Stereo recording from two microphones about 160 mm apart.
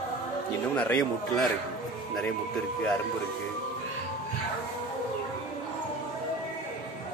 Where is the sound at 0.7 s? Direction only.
5° left (ahead or behind).